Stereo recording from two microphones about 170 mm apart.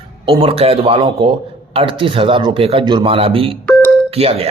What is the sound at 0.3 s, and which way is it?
A man's voice, 35° right (ahead or behind).